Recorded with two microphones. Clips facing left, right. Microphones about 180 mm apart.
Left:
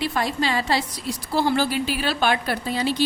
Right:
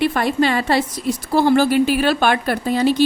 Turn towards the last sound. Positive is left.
turn(degrees=-50)  # may be behind; listen again after turning